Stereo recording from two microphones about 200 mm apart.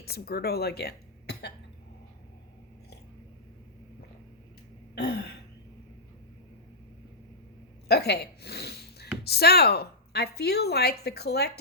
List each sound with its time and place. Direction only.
0.0 s speech: 50° left (ahead or behind)
4.9 s throat clearing: 55° left (ahead or behind)
7.9 s speech: 55° left (ahead or behind)